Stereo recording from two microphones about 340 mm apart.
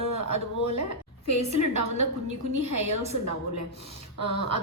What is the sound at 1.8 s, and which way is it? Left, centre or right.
Speech, left.